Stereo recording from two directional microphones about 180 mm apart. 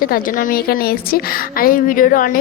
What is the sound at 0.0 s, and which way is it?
A woman's voice, 50° left (ahead or behind).